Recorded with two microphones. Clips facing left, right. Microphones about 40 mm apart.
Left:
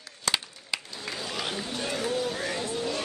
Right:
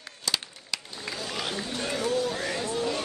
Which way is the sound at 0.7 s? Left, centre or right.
Left.